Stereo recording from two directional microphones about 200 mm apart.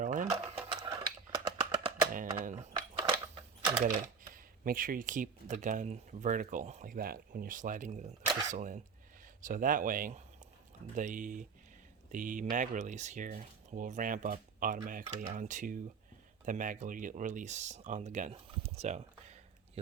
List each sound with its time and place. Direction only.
0.0 s sewing machine: 40° right (ahead or behind)
0.3 s a sound: 20° right (ahead or behind)
2.6 s typing: 20° right (ahead or behind)
3.8 s speech: 45° right (ahead or behind)